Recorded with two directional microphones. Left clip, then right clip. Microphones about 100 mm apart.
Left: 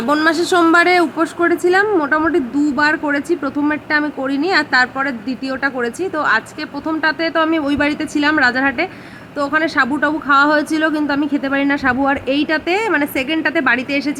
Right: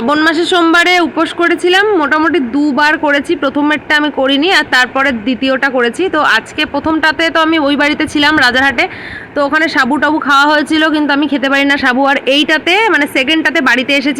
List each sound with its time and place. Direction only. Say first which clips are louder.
0.1 s a man's voice: right 4 dB; centre (ahead or behind)